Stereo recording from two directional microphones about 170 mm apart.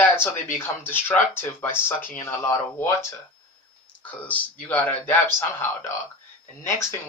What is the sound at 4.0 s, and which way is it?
Speech, 10° left (ahead or behind).